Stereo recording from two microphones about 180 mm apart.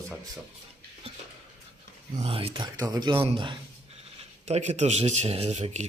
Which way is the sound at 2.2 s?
30° right (ahead or behind).